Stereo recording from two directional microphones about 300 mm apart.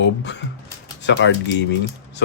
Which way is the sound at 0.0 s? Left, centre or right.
Left.